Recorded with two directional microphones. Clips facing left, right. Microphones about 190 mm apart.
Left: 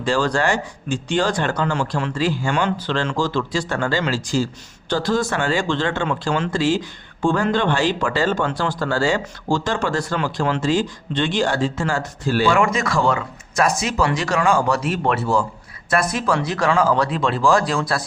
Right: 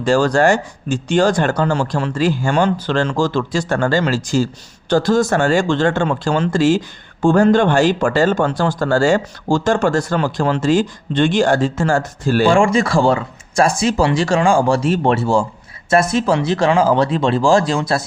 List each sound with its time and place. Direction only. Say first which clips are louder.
0.0 s speech: right 6 dB; 45° right (ahead or behind)
12.5 s speech: right 6 dB; 30° right (ahead or behind)